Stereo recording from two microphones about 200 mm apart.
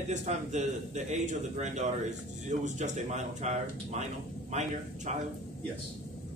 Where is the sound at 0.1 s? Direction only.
35° right (ahead or behind).